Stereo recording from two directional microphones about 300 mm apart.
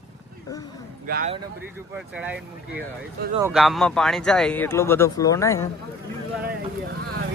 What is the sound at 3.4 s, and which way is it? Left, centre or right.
Speech, centre.